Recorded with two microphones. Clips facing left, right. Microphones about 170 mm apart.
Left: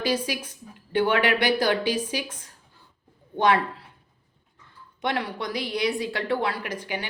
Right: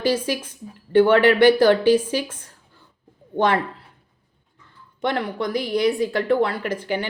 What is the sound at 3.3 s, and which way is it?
Speech, 50° right (ahead or behind).